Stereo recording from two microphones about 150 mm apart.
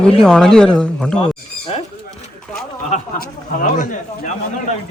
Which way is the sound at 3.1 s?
75° left (ahead or behind).